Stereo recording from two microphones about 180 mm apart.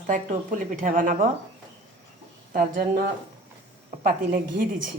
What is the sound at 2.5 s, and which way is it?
A woman's voice, 55° right (ahead or behind).